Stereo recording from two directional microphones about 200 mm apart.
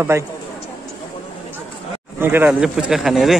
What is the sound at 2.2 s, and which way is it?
Speech, 10° right (ahead or behind).